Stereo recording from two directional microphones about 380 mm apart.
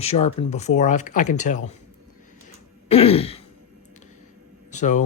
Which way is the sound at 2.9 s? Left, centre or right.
Centre.